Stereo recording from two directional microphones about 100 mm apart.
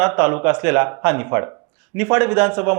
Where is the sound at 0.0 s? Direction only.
15° right (ahead or behind).